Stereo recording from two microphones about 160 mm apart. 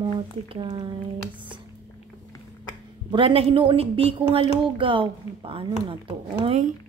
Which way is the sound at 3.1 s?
35° right (ahead or behind).